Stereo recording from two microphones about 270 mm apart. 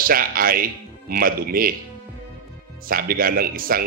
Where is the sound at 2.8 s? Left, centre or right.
Right.